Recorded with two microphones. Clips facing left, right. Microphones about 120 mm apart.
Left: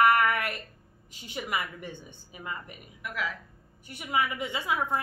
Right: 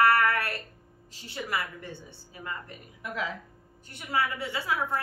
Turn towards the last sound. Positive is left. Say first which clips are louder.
# left 1 dB
turn(degrees=15)  # may be behind; listen again after turning